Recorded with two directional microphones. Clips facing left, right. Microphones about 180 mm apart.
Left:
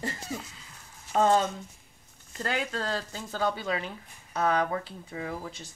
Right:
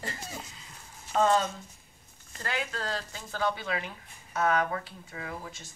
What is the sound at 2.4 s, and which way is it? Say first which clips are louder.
Speech: left 3 dB; 35° left (ahead or behind).